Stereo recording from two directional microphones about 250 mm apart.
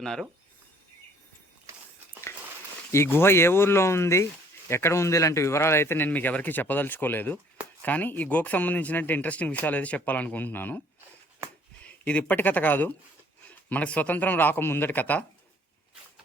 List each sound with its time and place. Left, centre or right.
0.0 s speech: centre
2.9 s speech: centre